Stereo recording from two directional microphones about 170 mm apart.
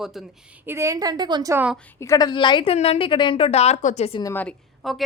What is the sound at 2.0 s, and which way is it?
A woman's voice, 20° left (ahead or behind).